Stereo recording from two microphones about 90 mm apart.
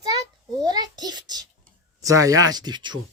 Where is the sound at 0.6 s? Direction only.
50° right (ahead or behind).